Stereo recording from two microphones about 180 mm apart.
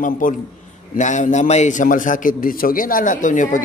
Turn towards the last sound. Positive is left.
turn(degrees=45)  # may be behind; listen again after turning